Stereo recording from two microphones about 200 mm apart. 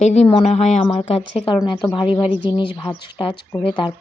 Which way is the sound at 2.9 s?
25° left (ahead or behind).